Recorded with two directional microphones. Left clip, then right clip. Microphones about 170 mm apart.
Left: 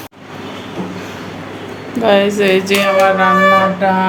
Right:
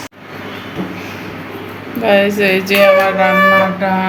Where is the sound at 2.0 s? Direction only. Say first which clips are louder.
Even; 20° left (ahead or behind).